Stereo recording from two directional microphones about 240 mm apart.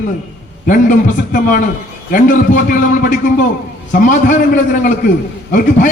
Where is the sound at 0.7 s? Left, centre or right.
Left.